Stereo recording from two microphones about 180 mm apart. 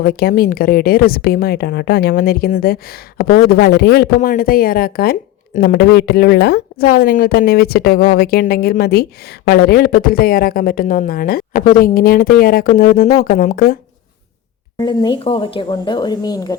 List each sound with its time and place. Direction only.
0.0 s speech: 55° left (ahead or behind)
14.8 s speech: 25° left (ahead or behind)